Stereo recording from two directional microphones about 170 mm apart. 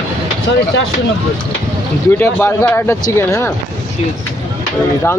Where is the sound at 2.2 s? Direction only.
10° left (ahead or behind).